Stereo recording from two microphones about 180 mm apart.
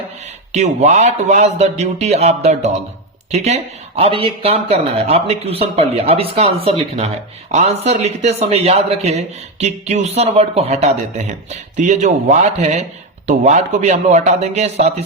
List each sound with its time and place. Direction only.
0.5 s speech: 40° right (ahead or behind)